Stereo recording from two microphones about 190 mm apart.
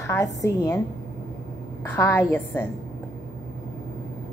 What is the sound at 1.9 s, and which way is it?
Speech, 10° left (ahead or behind).